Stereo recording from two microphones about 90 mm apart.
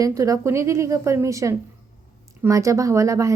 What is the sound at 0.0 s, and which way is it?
Speech, 40° right (ahead or behind).